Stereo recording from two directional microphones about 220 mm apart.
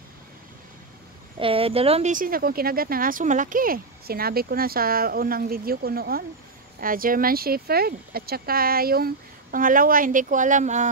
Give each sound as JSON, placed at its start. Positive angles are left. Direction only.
{"t": 1.4, "sound": "speech", "side_deg": -25}